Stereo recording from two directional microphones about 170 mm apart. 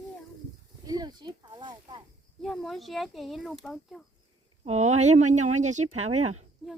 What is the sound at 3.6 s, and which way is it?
Speech, centre (ahead or behind).